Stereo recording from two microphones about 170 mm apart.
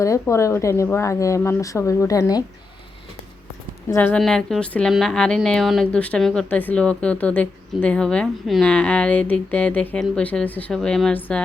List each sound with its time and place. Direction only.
0.0 s a woman's voice: 20° left (ahead or behind)
3.9 s a woman's voice: 5° left (ahead or behind)